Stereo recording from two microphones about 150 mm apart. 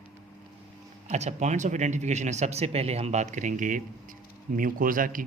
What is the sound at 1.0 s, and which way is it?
A man's voice, 50° right (ahead or behind).